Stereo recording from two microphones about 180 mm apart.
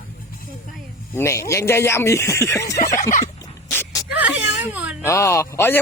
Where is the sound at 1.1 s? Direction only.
15° left (ahead or behind).